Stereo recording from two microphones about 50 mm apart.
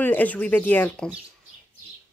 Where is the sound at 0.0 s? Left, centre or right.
Left.